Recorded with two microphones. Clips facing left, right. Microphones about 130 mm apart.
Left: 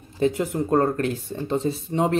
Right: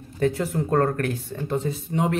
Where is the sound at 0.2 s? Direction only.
20° left (ahead or behind).